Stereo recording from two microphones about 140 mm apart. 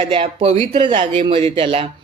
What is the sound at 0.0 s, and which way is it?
Speech, 40° right (ahead or behind).